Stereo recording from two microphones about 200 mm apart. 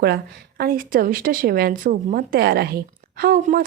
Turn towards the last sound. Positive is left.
turn(degrees=-40)  # may be behind; listen again after turning